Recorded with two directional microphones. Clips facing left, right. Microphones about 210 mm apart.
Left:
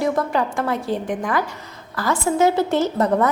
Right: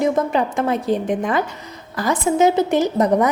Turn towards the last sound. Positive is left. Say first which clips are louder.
# right 2 dB
turn(degrees=-15)  # may be behind; listen again after turning